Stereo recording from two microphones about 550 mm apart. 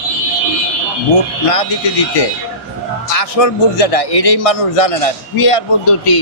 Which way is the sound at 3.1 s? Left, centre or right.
Left.